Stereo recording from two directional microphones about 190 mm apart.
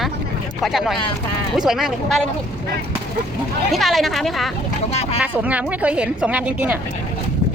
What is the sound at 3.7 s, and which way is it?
A woman's voice, centre (ahead or behind).